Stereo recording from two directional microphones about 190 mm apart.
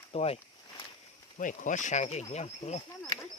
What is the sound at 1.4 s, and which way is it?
Speech, 45° left (ahead or behind).